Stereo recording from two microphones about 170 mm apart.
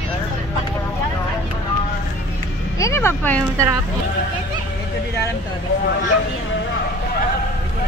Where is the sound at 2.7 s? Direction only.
15° left (ahead or behind).